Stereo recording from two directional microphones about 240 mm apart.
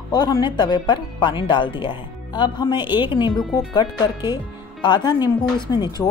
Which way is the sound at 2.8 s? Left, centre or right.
Centre.